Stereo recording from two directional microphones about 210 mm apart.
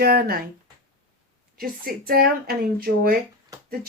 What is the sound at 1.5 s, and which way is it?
Speech, 45° right (ahead or behind).